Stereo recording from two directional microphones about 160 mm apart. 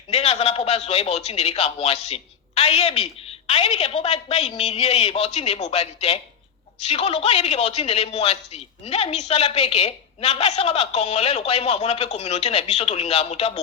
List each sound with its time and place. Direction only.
0.1 s a woman's voice: 40° left (ahead or behind)